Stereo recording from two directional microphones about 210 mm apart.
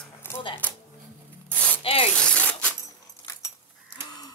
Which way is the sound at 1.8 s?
25° left (ahead or behind).